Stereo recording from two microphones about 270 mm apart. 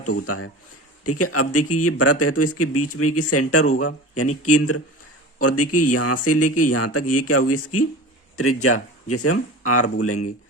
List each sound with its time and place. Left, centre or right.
0.3 s speech: left